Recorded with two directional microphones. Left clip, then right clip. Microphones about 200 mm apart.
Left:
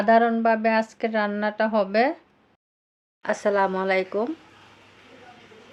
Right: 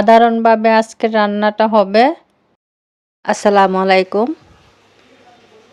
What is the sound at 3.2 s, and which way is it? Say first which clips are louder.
Speech: right 11 dB; 40° right (ahead or behind).